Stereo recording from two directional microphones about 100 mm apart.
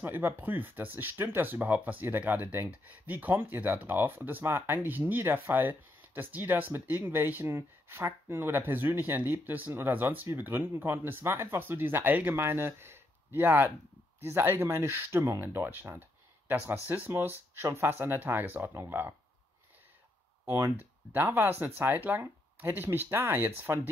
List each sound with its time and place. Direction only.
0.0 s speech: 20° right (ahead or behind)
20.4 s speech: 25° right (ahead or behind)